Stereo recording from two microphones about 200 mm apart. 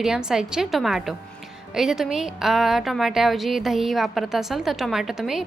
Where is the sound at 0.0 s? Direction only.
5° right (ahead or behind).